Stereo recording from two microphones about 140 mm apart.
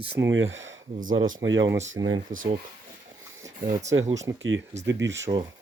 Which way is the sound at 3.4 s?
25° right (ahead or behind).